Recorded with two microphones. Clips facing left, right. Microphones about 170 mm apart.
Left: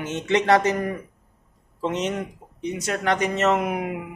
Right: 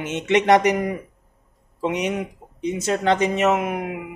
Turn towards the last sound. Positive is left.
turn(degrees=0)  # may be behind; listen again after turning